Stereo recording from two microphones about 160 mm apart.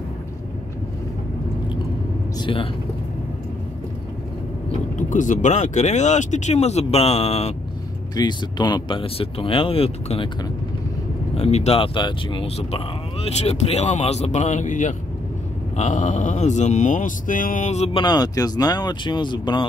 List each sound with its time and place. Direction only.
2.3 s speech: 35° left (ahead or behind)
4.9 s speech: 55° left (ahead or behind)
8.2 s speech: 25° left (ahead or behind)
11.3 s speech: 40° left (ahead or behind)
18.0 s speech: 25° left (ahead or behind)